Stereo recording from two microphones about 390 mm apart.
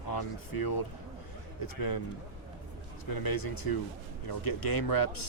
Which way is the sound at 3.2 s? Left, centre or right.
Left.